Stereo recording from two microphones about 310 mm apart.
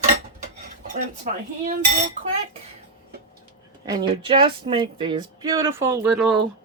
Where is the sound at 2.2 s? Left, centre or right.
Right.